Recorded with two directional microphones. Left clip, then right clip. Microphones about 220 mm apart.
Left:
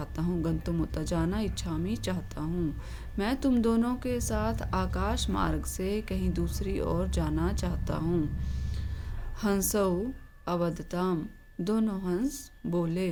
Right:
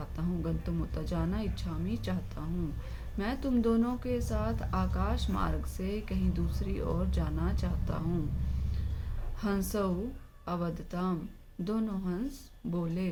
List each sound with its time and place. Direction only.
0.0 s a woman's voice: 50° left (ahead or behind)
9.4 s a woman's voice: 50° left (ahead or behind)